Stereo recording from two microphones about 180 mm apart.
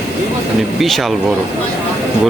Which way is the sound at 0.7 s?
Centre (ahead or behind).